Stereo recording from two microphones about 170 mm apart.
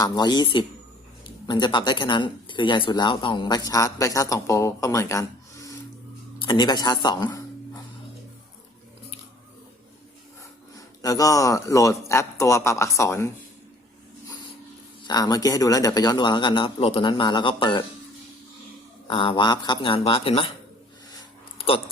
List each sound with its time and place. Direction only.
0.0 s speech: 25° left (ahead or behind)
10.8 s a man's voice: 20° left (ahead or behind)
15.0 s speech: 25° left (ahead or behind)
19.0 s speech: 30° left (ahead or behind)